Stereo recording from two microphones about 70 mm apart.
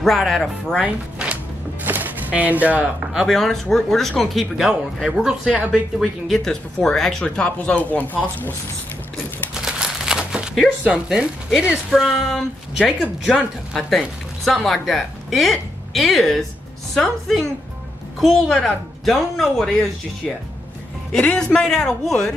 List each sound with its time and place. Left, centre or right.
0.0 s a woman's voice: centre
0.8 s music: centre
1.9 s speech: right
3.3 s a woman's voice: centre
7.2 s speech: centre
9.5 s a sound: centre
11.1 s speech: centre
11.9 s a woman's voice: centre
21.2 s speech: centre